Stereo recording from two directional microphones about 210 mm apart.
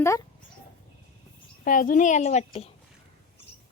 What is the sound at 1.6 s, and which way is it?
A child's voice, 40° left (ahead or behind).